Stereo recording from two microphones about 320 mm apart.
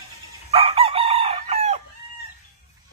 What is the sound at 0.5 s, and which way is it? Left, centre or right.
Chicken, centre.